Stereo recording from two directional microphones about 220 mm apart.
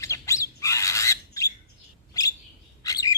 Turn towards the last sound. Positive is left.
turn(degrees=15)  # may be behind; listen again after turning